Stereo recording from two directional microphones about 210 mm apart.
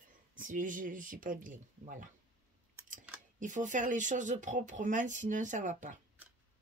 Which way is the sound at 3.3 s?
35° right (ahead or behind).